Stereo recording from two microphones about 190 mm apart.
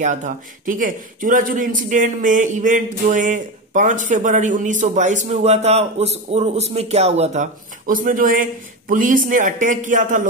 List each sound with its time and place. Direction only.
0.0 s a man's voice: 40° right (ahead or behind)
7.8 s a man's voice: 45° right (ahead or behind)